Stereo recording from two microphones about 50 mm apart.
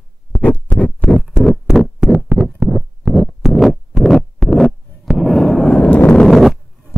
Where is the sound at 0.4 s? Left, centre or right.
Left.